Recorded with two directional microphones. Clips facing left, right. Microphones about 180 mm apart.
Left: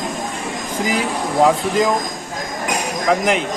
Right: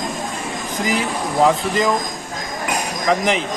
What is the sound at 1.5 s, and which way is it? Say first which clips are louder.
Speech: left 1 dB; 5° left (ahead or behind).